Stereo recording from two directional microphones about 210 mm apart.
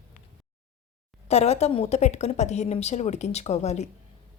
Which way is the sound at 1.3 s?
30° left (ahead or behind).